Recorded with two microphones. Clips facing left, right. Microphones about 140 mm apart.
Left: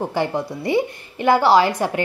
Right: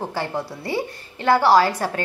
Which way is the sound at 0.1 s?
20° left (ahead or behind).